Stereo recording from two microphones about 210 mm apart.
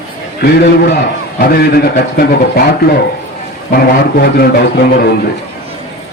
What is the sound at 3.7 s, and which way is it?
Speech, 45° left (ahead or behind).